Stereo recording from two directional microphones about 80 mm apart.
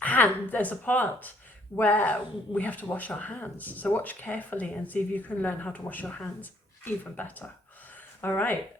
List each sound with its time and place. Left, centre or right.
0.0 s speech: centre